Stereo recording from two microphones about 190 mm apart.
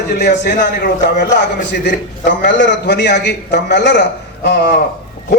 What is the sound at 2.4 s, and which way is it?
A man's voice, 65° left (ahead or behind).